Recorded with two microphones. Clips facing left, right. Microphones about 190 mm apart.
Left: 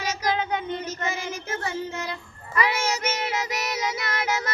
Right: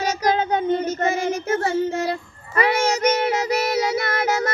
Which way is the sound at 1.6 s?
30° right (ahead or behind).